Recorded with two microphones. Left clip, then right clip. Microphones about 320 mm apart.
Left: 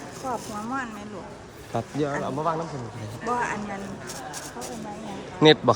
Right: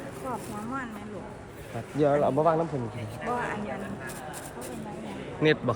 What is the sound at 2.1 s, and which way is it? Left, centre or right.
Speech, centre.